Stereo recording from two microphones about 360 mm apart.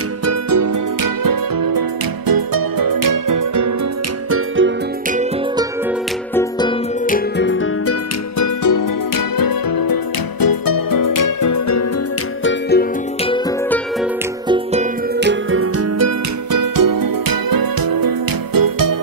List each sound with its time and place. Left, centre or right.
0.2 s music: right
4.3 s music: right
7.1 s music: left
8.6 s music: left
12.4 s music: left
14.5 s music: centre
15.1 s music: right
16.5 s music: right